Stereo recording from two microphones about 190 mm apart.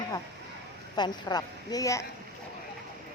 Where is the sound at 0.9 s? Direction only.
20° left (ahead or behind).